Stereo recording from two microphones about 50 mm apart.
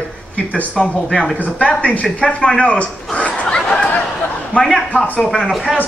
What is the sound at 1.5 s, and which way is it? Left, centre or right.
Speech, left.